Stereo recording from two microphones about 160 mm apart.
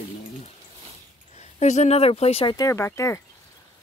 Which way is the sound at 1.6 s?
45° left (ahead or behind).